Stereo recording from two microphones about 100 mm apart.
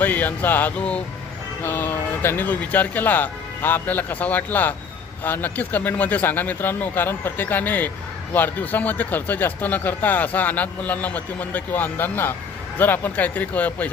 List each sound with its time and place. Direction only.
0.0 s speech: 20° left (ahead or behind)
1.6 s speech: 25° left (ahead or behind)